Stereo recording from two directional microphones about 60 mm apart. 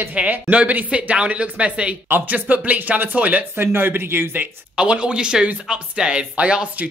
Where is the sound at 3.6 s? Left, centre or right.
Right.